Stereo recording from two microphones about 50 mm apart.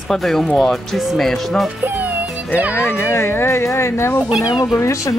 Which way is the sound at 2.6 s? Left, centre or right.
Right.